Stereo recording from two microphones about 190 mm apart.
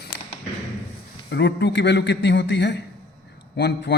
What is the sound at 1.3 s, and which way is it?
A man's voice, 65° left (ahead or behind).